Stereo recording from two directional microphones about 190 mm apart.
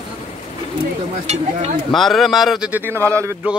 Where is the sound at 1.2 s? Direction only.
35° right (ahead or behind).